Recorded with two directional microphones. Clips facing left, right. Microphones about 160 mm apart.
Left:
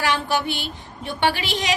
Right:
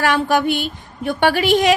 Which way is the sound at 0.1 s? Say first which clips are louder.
Right 6 dB; 55° right (ahead or behind).